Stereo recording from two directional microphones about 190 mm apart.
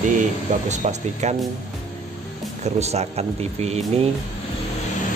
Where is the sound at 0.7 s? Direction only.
40° right (ahead or behind).